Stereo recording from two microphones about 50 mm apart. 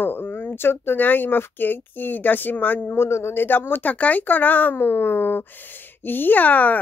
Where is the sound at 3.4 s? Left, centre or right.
Left.